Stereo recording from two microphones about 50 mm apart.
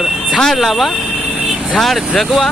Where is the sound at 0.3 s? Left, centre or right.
Centre.